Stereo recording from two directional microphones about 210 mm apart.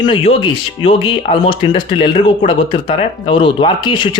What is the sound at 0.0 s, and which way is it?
A man's voice, 25° left (ahead or behind).